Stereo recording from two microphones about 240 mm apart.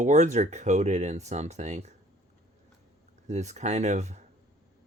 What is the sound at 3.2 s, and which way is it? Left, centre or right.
Speech, right.